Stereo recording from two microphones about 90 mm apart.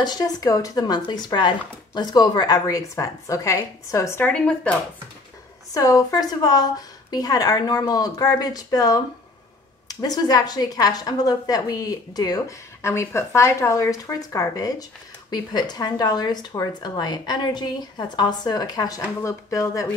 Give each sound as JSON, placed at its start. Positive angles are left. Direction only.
{"t": 0.0, "sound": "a woman's voice", "side_deg": 50}
{"t": 4.2, "sound": "speech", "side_deg": 15}
{"t": 5.7, "sound": "a woman's voice", "side_deg": 40}
{"t": 12.8, "sound": "a woman's voice", "side_deg": 30}
{"t": 15.3, "sound": "a woman's voice", "side_deg": 50}